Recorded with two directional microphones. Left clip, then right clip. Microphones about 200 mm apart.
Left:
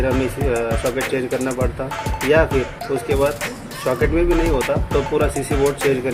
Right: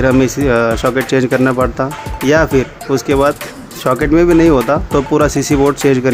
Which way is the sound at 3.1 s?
50° right (ahead or behind).